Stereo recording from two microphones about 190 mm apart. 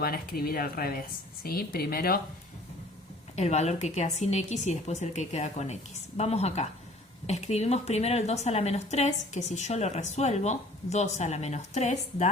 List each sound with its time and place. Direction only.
0.0 s speech: 50° left (ahead or behind)
3.3 s a woman's voice: 35° left (ahead or behind)